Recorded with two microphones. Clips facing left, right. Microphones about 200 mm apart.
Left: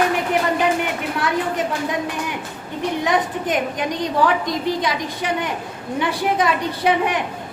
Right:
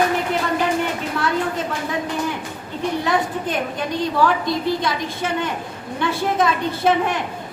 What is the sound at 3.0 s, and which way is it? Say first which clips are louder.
A woman's voice: left 3 dB; 15° left (ahead or behind).